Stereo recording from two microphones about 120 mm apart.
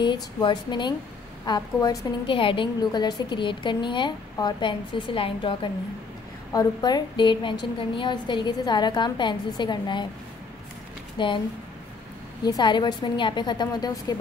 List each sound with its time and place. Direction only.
0.0 s a woman's voice: 40° left (ahead or behind)
2.3 s a woman's voice: 45° left (ahead or behind)
6.5 s a woman's voice: 35° left (ahead or behind)
11.1 s speech: 45° left (ahead or behind)
12.4 s a woman's voice: 35° left (ahead or behind)